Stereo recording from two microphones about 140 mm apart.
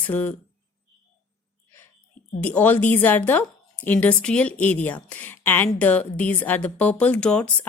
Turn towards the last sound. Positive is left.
turn(degrees=5)  # may be behind; listen again after turning